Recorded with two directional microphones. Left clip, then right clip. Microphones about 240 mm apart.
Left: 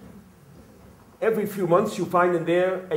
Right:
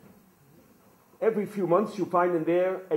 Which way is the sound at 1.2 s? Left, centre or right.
Right.